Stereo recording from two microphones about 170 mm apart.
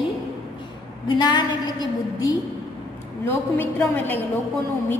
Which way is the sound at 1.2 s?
25° left (ahead or behind).